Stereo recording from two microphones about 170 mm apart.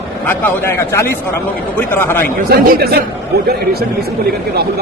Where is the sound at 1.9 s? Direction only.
15° left (ahead or behind).